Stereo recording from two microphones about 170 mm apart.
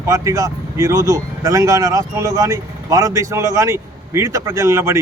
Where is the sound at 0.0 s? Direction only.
20° right (ahead or behind).